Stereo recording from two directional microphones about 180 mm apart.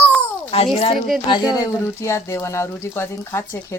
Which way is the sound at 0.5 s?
35° left (ahead or behind).